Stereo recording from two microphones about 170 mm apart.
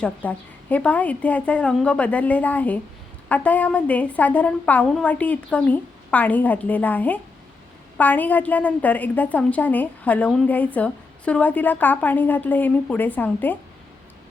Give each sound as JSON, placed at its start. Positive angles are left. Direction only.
{"t": 0.0, "sound": "a woman's voice", "side_deg": 10}